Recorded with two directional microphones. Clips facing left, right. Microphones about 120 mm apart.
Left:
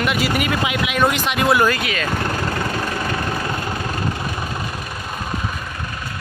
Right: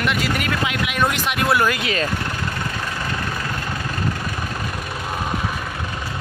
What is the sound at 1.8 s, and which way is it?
Speech, 30° right (ahead or behind).